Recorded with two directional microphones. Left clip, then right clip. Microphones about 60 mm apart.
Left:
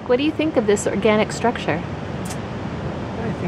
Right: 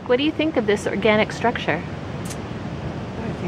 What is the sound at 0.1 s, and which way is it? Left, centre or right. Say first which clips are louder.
A woman's voice: left 1 dB; left.